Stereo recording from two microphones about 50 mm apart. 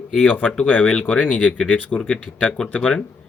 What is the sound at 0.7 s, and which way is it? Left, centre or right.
Speech, left.